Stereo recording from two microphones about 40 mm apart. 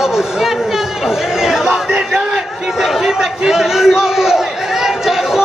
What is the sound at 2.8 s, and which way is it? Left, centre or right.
Crowd, centre.